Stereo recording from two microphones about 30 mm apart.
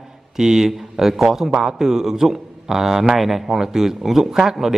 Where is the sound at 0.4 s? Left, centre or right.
Centre.